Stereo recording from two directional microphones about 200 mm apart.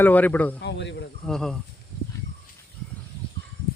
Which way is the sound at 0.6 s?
60° left (ahead or behind).